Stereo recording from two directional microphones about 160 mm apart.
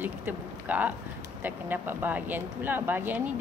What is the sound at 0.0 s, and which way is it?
Speech, 10° right (ahead or behind).